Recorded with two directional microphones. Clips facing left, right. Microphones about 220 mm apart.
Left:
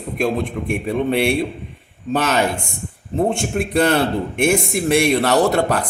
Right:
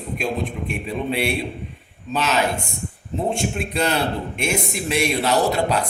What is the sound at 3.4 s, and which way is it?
A man's voice, 50° left (ahead or behind).